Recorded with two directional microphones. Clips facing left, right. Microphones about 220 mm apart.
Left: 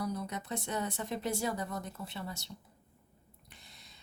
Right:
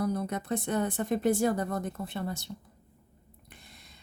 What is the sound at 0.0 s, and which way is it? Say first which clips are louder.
Speech: right 6 dB; 55° right (ahead or behind).